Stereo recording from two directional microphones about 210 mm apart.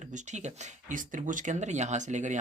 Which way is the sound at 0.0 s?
35° right (ahead or behind).